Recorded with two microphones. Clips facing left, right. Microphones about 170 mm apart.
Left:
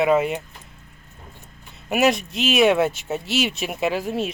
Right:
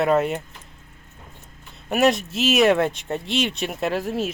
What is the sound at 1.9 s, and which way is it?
Speech, centre (ahead or behind).